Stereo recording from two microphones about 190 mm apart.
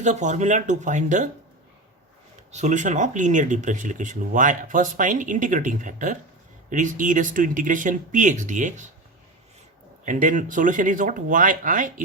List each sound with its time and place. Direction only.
0.0 s speech: 40° right (ahead or behind)
2.5 s speech: 40° right (ahead or behind)
10.1 s speech: 40° right (ahead or behind)